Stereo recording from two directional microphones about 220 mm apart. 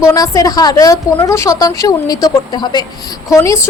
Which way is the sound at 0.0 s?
15° left (ahead or behind).